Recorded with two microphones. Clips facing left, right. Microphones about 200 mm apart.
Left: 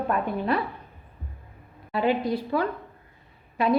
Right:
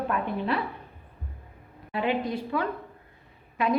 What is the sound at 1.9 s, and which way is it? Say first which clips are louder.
Speech: left 3 dB; 35° left (ahead or behind).